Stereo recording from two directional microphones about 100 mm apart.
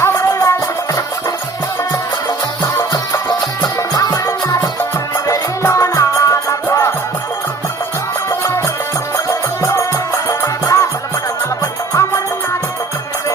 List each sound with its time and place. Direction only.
0.0 s music: 30° left (ahead or behind)
2.7 s music: 30° left (ahead or behind)
8.3 s music: 25° left (ahead or behind)
11.9 s music: 30° left (ahead or behind)